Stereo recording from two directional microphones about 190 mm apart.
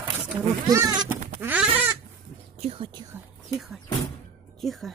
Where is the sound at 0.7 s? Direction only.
20° right (ahead or behind).